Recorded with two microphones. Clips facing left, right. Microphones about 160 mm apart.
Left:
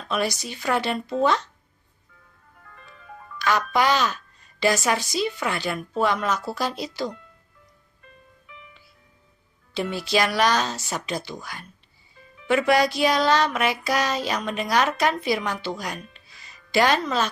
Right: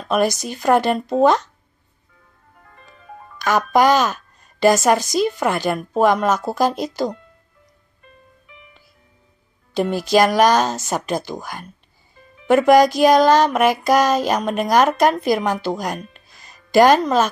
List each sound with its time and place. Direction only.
0.1 s child singing: 45° right (ahead or behind)
2.6 s music: 30° right (ahead or behind)
3.3 s child singing: 45° right (ahead or behind)
9.8 s child singing: 45° right (ahead or behind)